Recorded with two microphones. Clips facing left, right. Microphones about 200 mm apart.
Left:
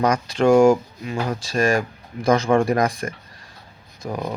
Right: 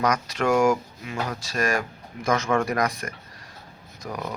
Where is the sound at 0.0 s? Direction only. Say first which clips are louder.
Left 6 dB; 30° left (ahead or behind).